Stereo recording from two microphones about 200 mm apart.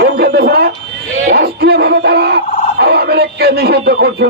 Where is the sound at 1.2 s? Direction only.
50° right (ahead or behind).